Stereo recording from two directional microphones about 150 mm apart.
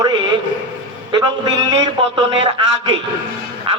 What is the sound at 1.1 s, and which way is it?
A man's voice, 30° right (ahead or behind).